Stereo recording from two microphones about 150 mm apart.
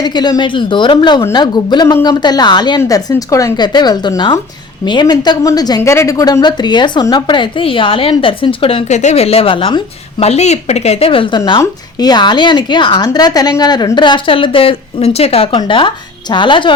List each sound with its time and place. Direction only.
0.0 s a woman's voice: 30° left (ahead or behind)